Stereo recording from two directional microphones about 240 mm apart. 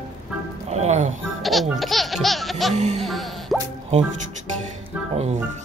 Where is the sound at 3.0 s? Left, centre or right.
Centre.